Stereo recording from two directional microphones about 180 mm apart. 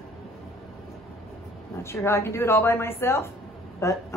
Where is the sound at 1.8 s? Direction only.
15° left (ahead or behind).